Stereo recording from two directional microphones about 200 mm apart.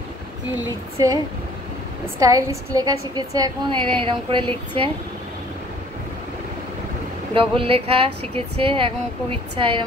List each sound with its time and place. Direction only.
0.9 s a woman's voice: 20° right (ahead or behind)
7.3 s a woman's voice: 25° right (ahead or behind)